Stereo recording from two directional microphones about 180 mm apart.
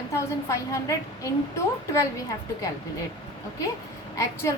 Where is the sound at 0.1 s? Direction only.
15° left (ahead or behind).